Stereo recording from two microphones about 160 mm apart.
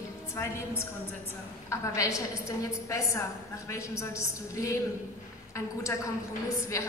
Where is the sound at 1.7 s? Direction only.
20° left (ahead or behind).